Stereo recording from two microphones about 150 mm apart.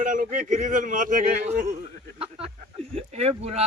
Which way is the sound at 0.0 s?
60° right (ahead or behind).